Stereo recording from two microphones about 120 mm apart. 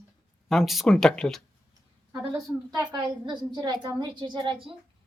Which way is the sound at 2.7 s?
35° right (ahead or behind).